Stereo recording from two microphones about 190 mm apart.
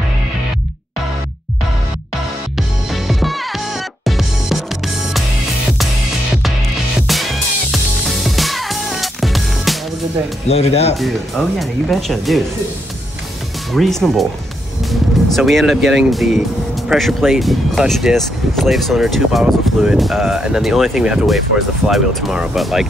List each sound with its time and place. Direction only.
2.5 s music: centre (ahead or behind)
7.1 s music: centre (ahead or behind)
10.5 s speech: 35° left (ahead or behind)
11.0 s speech: centre (ahead or behind)
13.7 s speech: centre (ahead or behind)